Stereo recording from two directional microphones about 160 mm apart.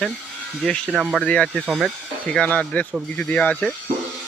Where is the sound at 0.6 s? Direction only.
Centre (ahead or behind).